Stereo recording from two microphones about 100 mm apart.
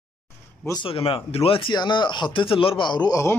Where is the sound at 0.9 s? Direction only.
65° left (ahead or behind); by 3.3 s 40° left (ahead or behind).